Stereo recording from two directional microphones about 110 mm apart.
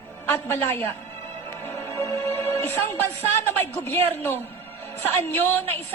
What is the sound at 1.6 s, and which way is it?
Music, 25° left (ahead or behind).